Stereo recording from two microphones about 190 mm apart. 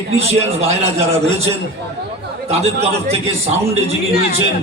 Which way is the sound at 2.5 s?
35° right (ahead or behind).